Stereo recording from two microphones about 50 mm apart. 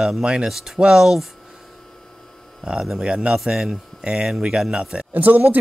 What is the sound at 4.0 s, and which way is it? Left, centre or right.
Speech, centre.